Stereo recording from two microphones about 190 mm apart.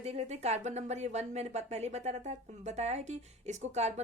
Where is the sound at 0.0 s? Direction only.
35° right (ahead or behind).